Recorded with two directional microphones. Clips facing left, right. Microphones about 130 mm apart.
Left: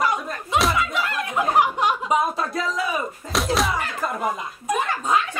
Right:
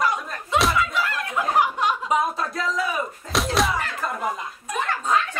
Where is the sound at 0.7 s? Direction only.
20° left (ahead or behind).